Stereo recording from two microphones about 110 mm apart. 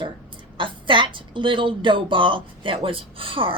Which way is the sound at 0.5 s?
50° right (ahead or behind).